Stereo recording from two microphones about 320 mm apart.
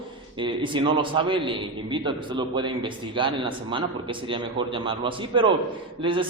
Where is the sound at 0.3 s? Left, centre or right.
Centre.